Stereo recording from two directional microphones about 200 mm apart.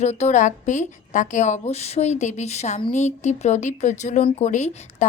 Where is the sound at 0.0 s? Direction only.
35° left (ahead or behind).